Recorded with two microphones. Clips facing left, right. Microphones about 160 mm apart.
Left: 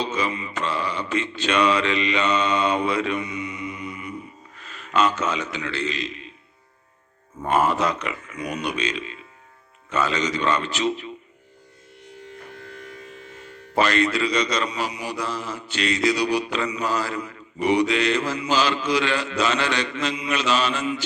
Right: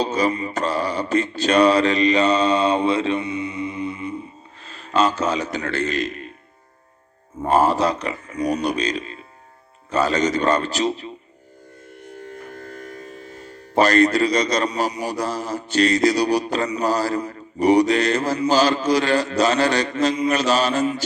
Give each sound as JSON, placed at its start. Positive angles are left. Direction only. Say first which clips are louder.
{"t": 0.0, "sound": "a man's voice", "louder": "right 5 dB", "side_deg": -40}
{"t": 7.4, "sound": "speech", "louder": "right 3 dB", "side_deg": -35}
{"t": 11.9, "sound": "music", "louder": "right 5 dB", "side_deg": -50}